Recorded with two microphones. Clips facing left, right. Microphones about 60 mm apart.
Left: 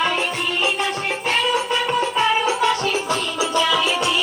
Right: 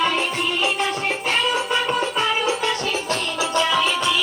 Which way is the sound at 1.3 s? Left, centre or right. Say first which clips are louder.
Left 2 dB; centre.